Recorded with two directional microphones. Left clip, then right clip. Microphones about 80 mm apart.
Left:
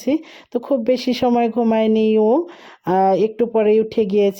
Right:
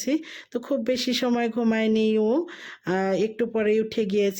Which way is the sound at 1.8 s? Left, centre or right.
Left.